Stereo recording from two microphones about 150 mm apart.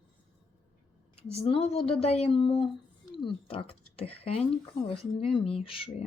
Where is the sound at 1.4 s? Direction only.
45° left (ahead or behind).